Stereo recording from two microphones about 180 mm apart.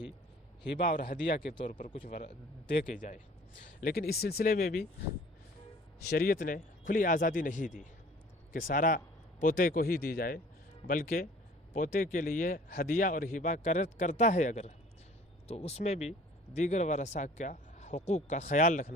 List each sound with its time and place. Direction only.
0.8 s speech: 50° left (ahead or behind)
1.5 s speech: 30° left (ahead or behind)
2.8 s speech: 45° left (ahead or behind)
6.0 s speech: 60° left (ahead or behind)